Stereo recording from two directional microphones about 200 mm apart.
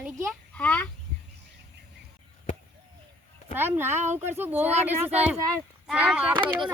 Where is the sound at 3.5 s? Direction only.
10° right (ahead or behind).